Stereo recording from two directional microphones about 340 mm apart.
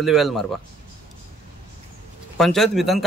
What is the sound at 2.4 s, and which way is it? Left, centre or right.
Speech, centre.